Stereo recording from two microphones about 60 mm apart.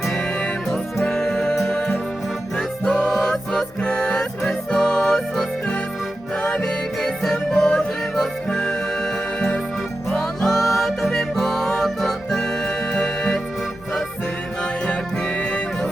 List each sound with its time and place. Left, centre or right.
0.7 s music: centre
2.9 s music: centre
10.1 s music: centre
14.6 s music: centre